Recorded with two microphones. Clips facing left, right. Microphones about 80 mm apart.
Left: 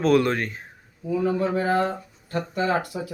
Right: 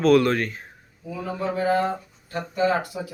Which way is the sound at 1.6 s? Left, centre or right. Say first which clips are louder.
Right 3 dB; left.